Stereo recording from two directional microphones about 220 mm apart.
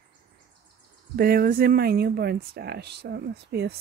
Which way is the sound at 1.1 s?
45° right (ahead or behind).